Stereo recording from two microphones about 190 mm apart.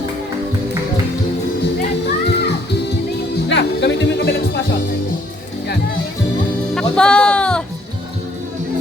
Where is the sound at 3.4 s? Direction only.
70° left (ahead or behind).